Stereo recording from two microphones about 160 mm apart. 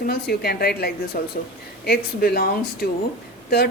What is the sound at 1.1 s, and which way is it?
Speech, 60° left (ahead or behind).